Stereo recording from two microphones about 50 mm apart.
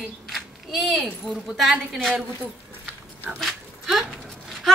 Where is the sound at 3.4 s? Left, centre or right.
Centre.